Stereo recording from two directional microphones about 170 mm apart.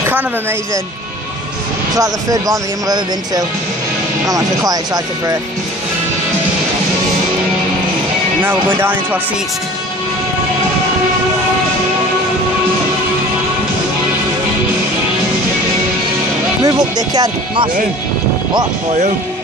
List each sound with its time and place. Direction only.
2.0 s speech: 20° right (ahead or behind)
8.4 s speech: 10° right (ahead or behind)
16.6 s speech: 20° right (ahead or behind)